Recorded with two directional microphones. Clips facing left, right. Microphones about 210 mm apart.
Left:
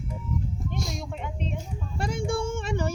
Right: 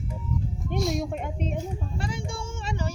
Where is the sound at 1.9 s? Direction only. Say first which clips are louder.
Left 5 dB; 45° left (ahead or behind).